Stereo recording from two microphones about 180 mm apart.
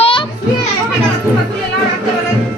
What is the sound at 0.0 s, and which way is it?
Children playing, 25° left (ahead or behind).